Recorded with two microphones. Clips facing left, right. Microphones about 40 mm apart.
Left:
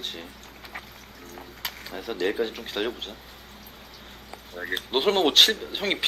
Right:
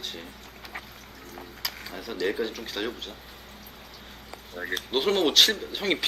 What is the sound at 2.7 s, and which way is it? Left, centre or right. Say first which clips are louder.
Speech: left 3 dB; left.